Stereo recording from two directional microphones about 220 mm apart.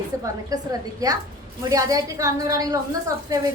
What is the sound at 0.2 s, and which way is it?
A woman's voice, 15° right (ahead or behind).